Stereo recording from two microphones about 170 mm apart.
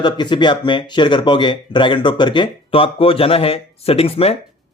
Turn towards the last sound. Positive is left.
turn(degrees=35)  # may be behind; listen again after turning